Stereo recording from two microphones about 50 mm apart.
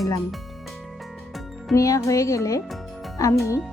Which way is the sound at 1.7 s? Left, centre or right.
Left.